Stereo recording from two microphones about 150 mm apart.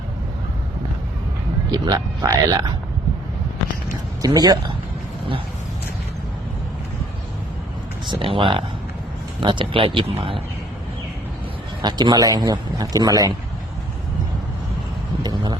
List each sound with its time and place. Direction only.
1.7 s speech: 25° right (ahead or behind)
4.2 s speech: 25° right (ahead or behind)
8.1 s speech: 35° right (ahead or behind)
11.8 s speech: 30° right (ahead or behind)
15.2 s a sound: 30° right (ahead or behind)